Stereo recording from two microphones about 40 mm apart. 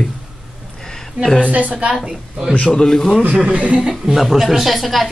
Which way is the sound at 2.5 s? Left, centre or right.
Left.